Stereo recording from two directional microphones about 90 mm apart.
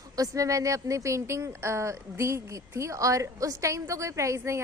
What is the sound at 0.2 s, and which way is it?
A woman's voice, 40° right (ahead or behind).